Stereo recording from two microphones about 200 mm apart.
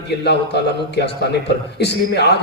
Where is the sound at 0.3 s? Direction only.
55° left (ahead or behind).